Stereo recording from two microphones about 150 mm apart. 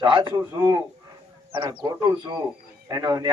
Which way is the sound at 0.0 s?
30° right (ahead or behind).